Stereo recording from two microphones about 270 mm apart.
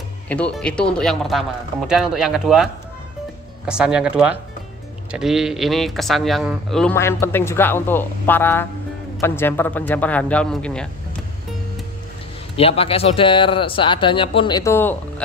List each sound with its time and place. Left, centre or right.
0.3 s speech: centre
12.5 s speech: left